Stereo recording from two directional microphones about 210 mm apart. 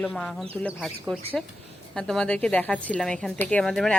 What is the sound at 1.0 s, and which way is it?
A woman's voice, 5° right (ahead or behind).